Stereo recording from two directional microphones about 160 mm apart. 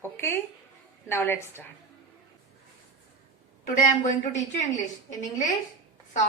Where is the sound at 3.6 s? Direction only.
55° left (ahead or behind).